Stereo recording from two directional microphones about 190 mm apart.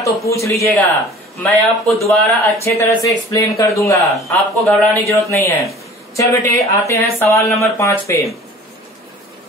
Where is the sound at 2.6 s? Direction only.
15° left (ahead or behind).